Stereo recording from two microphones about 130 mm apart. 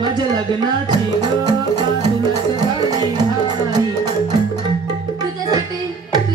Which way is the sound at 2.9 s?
30° right (ahead or behind).